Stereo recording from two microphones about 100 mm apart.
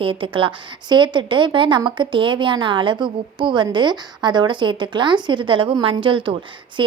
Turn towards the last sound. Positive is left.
turn(degrees=-55)  # may be behind; listen again after turning